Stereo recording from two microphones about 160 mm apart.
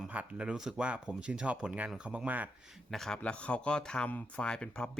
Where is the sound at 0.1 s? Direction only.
10° right (ahead or behind).